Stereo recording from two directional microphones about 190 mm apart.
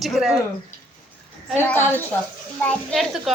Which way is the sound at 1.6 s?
10° left (ahead or behind).